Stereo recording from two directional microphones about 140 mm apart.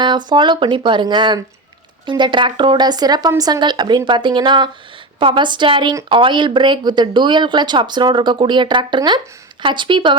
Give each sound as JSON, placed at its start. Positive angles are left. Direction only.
{"t": 0.0, "sound": "speech", "side_deg": -30}